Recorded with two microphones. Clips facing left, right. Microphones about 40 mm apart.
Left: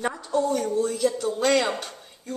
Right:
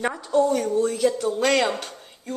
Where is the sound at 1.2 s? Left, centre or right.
Centre.